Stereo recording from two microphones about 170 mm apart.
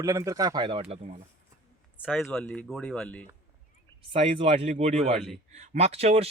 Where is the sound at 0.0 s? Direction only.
20° right (ahead or behind); by 0.9 s 35° right (ahead or behind).